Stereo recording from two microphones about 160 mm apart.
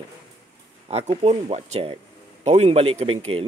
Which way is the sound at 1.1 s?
40° right (ahead or behind).